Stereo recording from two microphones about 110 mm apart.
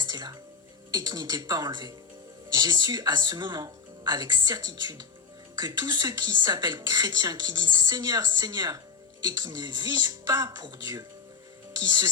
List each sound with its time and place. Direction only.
0.0 s music: 40° right (ahead or behind)
0.9 s speech: 40° right (ahead or behind)